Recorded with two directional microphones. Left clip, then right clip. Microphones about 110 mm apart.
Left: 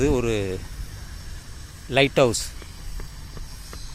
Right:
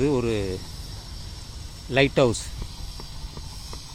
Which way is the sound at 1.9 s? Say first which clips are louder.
Left 2 dB; 20° left (ahead or behind).